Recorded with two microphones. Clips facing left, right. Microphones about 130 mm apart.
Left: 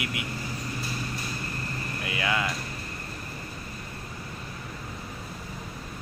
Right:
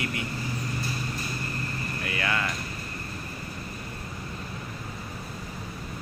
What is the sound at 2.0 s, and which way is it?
Speech, 15° left (ahead or behind).